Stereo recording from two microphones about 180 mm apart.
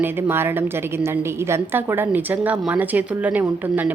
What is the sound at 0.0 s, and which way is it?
A woman's voice, 10° right (ahead or behind).